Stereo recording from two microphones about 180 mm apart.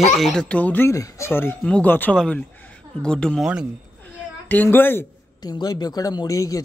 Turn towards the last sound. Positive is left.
turn(degrees=20)  # may be behind; listen again after turning